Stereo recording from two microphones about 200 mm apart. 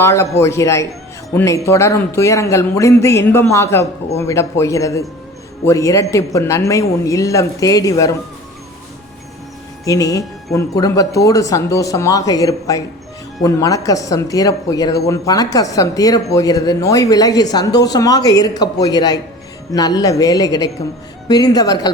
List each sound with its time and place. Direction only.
0.0 s speech: 15° left (ahead or behind)
9.8 s speech: 15° left (ahead or behind)